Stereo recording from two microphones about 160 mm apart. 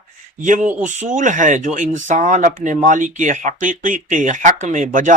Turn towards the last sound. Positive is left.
turn(degrees=-55)  # may be behind; listen again after turning